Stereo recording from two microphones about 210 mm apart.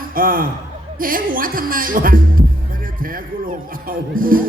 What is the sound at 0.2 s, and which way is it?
A man's voice, 40° right (ahead or behind).